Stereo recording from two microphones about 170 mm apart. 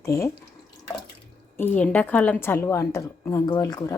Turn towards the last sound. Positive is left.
turn(degrees=20)  # may be behind; listen again after turning